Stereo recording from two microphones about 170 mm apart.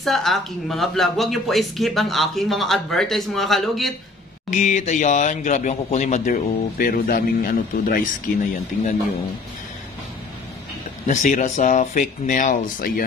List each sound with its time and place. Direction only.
0.0 s speech: centre (ahead or behind)
4.5 s speech: 45° left (ahead or behind)
11.1 s speech: 50° left (ahead or behind)